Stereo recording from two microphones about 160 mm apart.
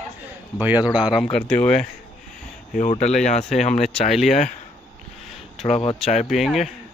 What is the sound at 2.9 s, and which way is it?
Speech, 45° left (ahead or behind).